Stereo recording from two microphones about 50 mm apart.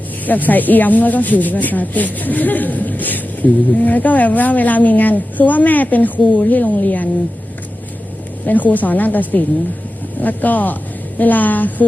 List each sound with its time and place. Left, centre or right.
0.3 s speech: left
8.4 s speech: left